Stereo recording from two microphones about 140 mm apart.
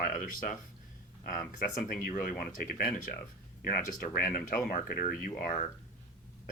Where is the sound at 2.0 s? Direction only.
85° left.